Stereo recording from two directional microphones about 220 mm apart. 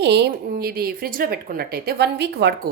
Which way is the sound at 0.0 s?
50° right (ahead or behind).